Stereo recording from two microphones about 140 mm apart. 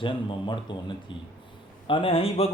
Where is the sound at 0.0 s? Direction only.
35° left (ahead or behind).